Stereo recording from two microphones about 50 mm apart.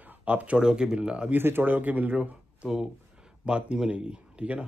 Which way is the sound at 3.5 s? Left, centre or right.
Right.